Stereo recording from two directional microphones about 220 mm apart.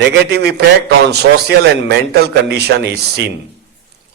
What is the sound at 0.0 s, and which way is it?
A man's voice, 50° right (ahead or behind).